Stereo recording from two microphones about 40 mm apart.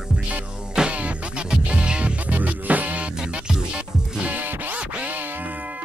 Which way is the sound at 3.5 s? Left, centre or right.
Centre.